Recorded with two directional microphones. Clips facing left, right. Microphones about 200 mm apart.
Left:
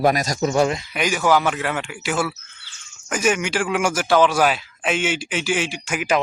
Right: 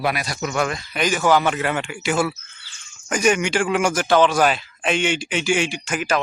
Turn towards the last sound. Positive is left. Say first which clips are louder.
# left 1 dB
turn(degrees=15)  # may be behind; listen again after turning